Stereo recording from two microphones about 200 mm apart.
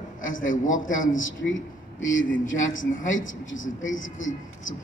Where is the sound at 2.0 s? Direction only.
70° left (ahead or behind).